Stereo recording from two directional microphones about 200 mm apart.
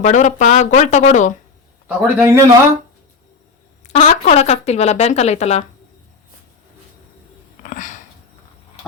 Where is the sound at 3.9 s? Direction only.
30° left (ahead or behind).